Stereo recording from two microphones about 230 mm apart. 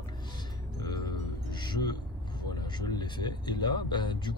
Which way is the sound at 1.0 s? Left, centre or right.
Centre.